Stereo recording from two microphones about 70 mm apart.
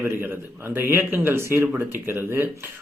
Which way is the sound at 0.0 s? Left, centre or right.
Right.